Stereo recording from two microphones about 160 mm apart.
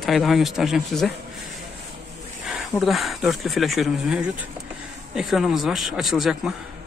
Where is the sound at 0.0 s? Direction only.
Centre (ahead or behind).